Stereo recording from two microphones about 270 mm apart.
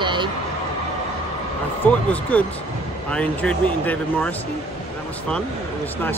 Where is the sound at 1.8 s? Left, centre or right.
Centre.